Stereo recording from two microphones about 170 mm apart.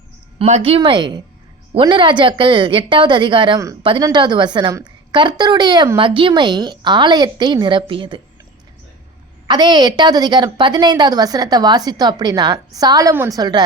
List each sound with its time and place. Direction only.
0.3 s a woman's voice: 35° right (ahead or behind)
9.5 s a woman's voice: 25° right (ahead or behind)